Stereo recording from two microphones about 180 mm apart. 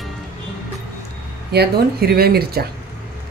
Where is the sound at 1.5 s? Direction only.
60° right (ahead or behind).